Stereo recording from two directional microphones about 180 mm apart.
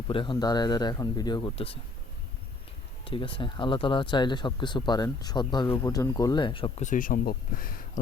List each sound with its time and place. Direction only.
0.1 s speech: 25° left (ahead or behind)
3.0 s speech: 30° left (ahead or behind)
6.8 s speech: 50° left (ahead or behind)